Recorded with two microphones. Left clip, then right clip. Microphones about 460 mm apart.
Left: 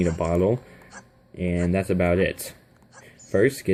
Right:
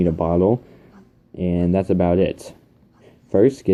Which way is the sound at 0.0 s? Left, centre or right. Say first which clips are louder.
Right 4 dB; left.